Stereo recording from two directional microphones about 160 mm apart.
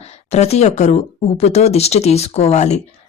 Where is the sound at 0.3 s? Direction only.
40° left (ahead or behind).